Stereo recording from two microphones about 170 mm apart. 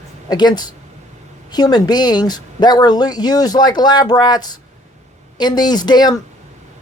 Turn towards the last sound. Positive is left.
turn(degrees=25)  # may be behind; listen again after turning